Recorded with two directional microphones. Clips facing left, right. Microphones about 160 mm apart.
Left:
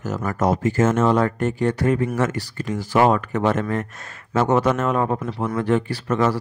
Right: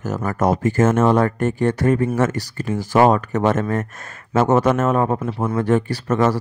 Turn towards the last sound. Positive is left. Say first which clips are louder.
# right 2 dB
turn(degrees=-45)  # may be behind; listen again after turning